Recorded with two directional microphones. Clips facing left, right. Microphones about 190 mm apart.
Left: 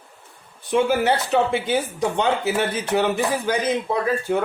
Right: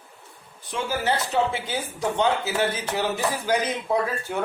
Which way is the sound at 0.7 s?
60° left (ahead or behind).